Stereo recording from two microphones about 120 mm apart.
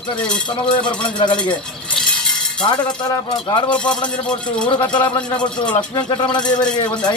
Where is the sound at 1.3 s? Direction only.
10° left (ahead or behind).